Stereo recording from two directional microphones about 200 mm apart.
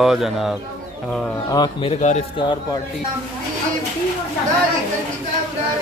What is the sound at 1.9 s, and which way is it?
Speech, 35° left (ahead or behind).